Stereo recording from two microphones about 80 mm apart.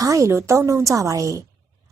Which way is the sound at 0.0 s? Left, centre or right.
Right.